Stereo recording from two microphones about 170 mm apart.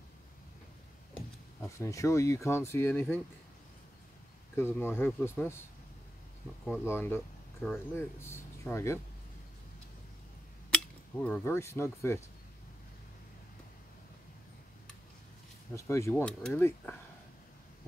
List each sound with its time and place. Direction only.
1.8 s speech: 20° left (ahead or behind)
4.6 s speech: 15° left (ahead or behind)
6.8 s speech: 15° left (ahead or behind)
10.7 s speech: 5° left (ahead or behind)
15.7 s speech: 15° left (ahead or behind)